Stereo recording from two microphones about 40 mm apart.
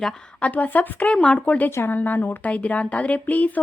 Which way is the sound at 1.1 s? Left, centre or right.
Left.